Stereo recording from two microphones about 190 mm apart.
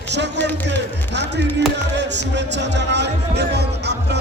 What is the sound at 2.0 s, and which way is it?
Speech, 65° right (ahead or behind).